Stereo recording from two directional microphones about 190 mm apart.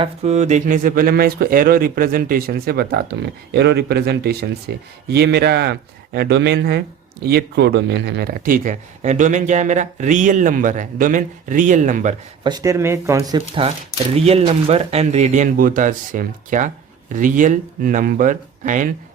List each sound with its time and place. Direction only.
0.0 s speech: 35° right (ahead or behind)
12.4 s speech: 20° right (ahead or behind); by 18.9 s 45° right (ahead or behind)